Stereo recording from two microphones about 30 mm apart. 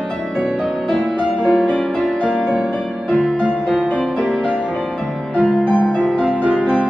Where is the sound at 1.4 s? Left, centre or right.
Right.